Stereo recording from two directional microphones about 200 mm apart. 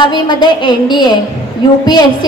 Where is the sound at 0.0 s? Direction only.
20° left (ahead or behind).